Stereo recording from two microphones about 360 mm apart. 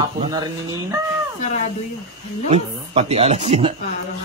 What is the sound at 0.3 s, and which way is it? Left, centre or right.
Speech, centre.